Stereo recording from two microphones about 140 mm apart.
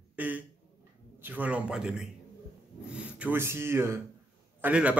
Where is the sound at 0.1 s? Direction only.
10° right (ahead or behind).